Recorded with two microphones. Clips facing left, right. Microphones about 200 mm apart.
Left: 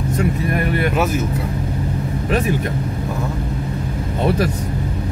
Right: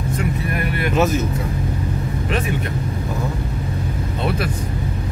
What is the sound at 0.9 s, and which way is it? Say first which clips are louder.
Speech: right 1 dB; 10° left (ahead or behind).